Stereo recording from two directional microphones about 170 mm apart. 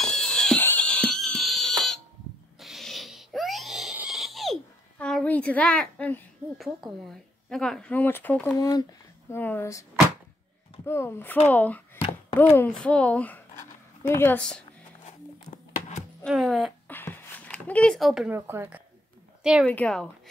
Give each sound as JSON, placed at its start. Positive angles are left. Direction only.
{"t": 0.0, "sound": "music", "side_deg": 5}
{"t": 2.6, "sound": "crying", "side_deg": 0}
{"t": 6.8, "sound": "speech", "side_deg": 5}
{"t": 8.5, "sound": "speech", "side_deg": 20}
{"t": 9.3, "sound": "speech", "side_deg": 10}
{"t": 10.9, "sound": "speech", "side_deg": 15}
{"t": 16.3, "sound": "speech", "side_deg": 0}
{"t": 16.8, "sound": "a sound", "side_deg": 10}
{"t": 19.6, "sound": "speech", "side_deg": 5}